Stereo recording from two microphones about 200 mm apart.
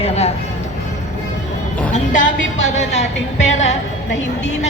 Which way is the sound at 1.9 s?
35° left (ahead or behind).